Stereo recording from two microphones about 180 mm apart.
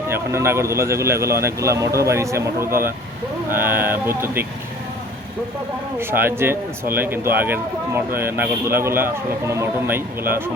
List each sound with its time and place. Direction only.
0.1 s a man's voice: 15° right (ahead or behind)
6.0 s a man's voice: 10° right (ahead or behind)